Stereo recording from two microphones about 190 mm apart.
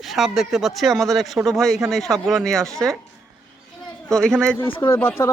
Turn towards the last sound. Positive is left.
turn(degrees=15)  # may be behind; listen again after turning